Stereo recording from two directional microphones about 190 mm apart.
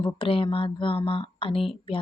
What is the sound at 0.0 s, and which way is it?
A woman's voice, 30° left (ahead or behind).